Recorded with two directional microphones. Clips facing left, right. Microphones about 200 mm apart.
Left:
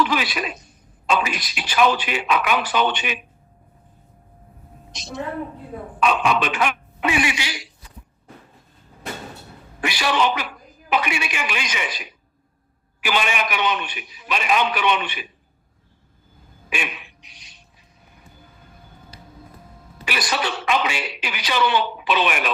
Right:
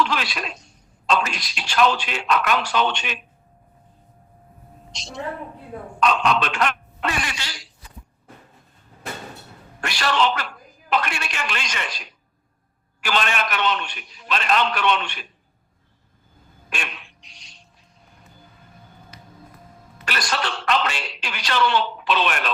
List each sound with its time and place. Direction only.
0.0 s a man's voice: 5° left (ahead or behind)
4.9 s a woman's voice: centre (ahead or behind)
9.8 s a man's voice: 5° left (ahead or behind)
16.6 s quack: 5° left (ahead or behind)
19.1 s music: 30° left (ahead or behind)
20.1 s speech: 5° left (ahead or behind)